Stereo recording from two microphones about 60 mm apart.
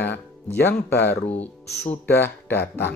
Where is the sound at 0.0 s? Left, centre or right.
Left.